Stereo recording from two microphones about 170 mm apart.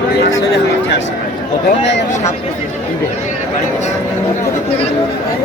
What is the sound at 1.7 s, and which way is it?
Speech, 90° left.